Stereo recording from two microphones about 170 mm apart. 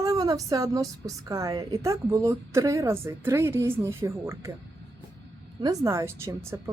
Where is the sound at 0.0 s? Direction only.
20° right (ahead or behind).